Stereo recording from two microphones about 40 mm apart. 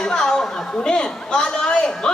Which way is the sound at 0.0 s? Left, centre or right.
Centre.